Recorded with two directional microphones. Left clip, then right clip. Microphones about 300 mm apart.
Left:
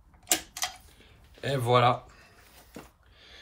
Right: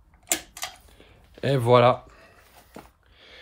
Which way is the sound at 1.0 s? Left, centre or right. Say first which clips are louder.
Right 7 dB; right.